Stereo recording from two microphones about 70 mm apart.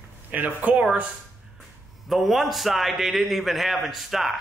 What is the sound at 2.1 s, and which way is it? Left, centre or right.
A man's voice, centre.